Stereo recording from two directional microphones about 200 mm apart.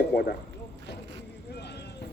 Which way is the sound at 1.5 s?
55° left (ahead or behind).